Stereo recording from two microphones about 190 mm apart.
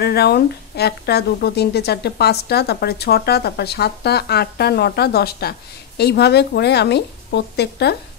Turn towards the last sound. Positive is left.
turn(degrees=60)  # may be behind; listen again after turning